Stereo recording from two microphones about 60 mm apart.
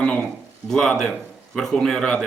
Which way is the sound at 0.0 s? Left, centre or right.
Centre.